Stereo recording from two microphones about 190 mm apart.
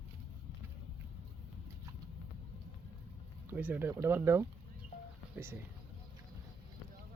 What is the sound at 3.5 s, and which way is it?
Speech, 10° right (ahead or behind).